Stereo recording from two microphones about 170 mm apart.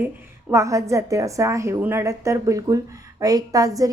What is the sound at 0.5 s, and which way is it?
A woman's voice, 20° right (ahead or behind).